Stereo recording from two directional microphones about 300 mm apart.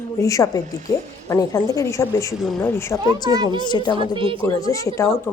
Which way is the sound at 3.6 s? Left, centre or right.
Centre.